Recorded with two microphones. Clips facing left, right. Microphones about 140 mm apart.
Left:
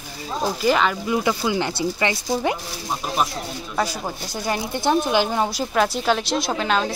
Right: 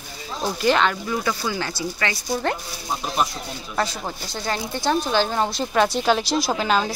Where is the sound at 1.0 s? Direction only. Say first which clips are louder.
Left 3 dB; 15° left (ahead or behind).